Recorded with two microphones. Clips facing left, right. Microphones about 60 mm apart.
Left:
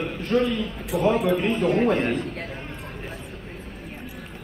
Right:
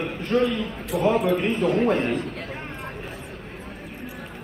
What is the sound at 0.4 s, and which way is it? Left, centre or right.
Speech, right.